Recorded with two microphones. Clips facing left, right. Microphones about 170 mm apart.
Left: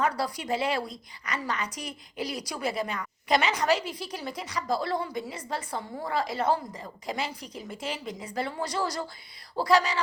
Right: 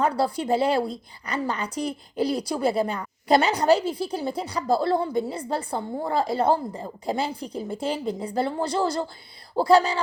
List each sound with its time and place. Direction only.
0.0 s a woman's voice: 30° right (ahead or behind)